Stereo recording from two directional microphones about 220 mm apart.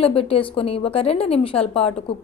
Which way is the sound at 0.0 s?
25° left (ahead or behind).